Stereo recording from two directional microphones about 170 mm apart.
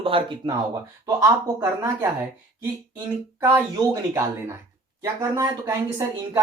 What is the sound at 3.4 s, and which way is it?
Speech, 15° right (ahead or behind).